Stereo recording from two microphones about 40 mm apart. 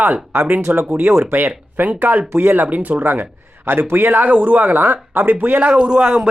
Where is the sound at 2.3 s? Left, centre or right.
Right.